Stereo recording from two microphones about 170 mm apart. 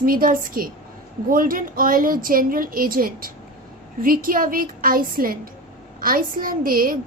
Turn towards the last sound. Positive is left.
turn(degrees=-55)  # may be behind; listen again after turning